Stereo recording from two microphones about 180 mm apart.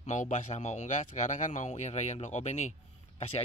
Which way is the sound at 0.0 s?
40° left (ahead or behind).